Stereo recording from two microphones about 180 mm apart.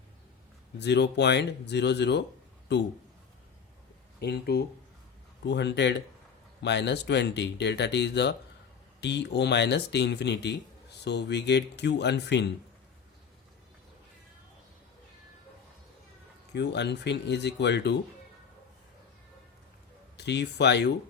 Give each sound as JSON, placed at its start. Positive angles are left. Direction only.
{"t": 0.8, "sound": "speech", "side_deg": 70}
{"t": 4.2, "sound": "speech", "side_deg": 65}
{"t": 16.5, "sound": "speech", "side_deg": 70}
{"t": 20.1, "sound": "speech", "side_deg": 70}